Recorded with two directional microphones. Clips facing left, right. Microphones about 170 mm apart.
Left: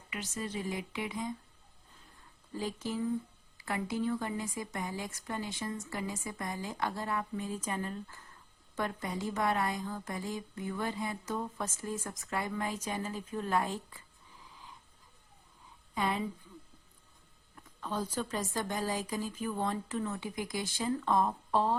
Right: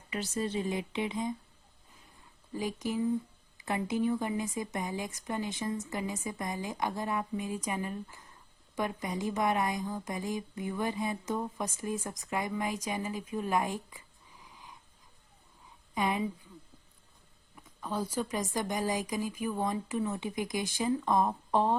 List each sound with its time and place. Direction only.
0.1 s speech: 30° right (ahead or behind)
2.5 s a woman's voice: 15° right (ahead or behind)
16.0 s a woman's voice: 15° right (ahead or behind)
17.5 s a woman's voice: 10° right (ahead or behind)